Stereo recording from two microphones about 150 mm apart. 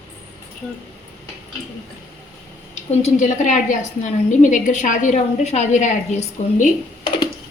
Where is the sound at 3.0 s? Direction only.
55° left (ahead or behind).